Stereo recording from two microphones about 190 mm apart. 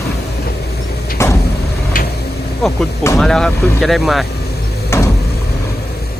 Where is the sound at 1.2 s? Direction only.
15° left (ahead or behind).